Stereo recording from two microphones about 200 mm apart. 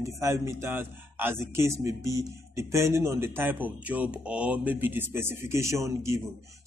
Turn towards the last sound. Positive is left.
turn(degrees=-15)  # may be behind; listen again after turning